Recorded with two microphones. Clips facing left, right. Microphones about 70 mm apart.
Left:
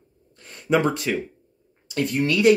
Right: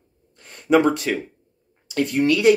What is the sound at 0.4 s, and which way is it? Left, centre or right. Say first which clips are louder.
Speech: right 4 dB; right.